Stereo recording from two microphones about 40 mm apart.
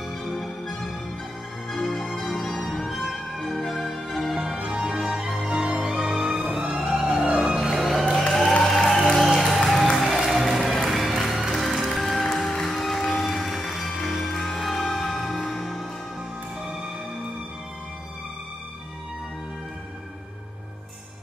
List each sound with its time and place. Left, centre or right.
0.2 s music: centre
4.7 s music: centre
6.9 s music: centre